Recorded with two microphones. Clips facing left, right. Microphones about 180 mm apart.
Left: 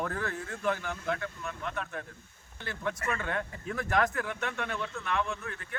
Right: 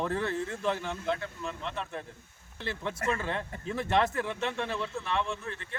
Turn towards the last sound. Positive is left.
turn(degrees=-30)  # may be behind; listen again after turning